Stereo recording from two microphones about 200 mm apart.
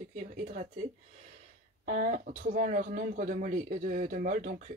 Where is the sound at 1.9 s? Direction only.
40° right (ahead or behind).